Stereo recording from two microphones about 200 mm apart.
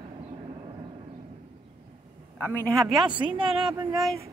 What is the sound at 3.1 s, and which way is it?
Speech, 25° right (ahead or behind).